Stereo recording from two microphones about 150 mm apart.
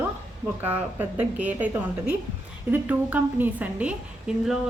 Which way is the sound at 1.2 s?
10° right (ahead or behind).